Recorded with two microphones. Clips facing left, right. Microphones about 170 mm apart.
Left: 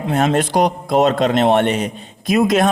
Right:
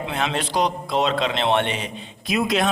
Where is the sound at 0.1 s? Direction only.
45° left (ahead or behind).